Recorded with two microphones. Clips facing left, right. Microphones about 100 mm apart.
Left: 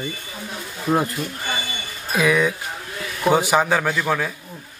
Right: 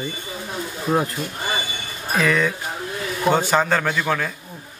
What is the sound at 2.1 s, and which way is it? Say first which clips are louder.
Speech: left 1 dB; 10° left (ahead or behind).